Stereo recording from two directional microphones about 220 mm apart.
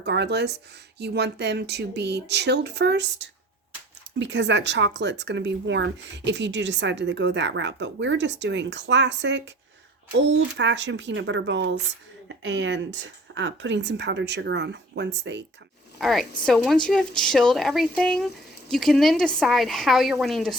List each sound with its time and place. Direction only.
0.0 s speech: 50° right (ahead or behind)
10.6 s speech: 55° right (ahead or behind)
16.0 s a woman's voice: centre (ahead or behind)